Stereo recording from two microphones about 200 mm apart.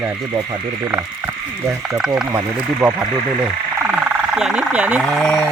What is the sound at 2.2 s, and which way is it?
Speech, 20° right (ahead or behind).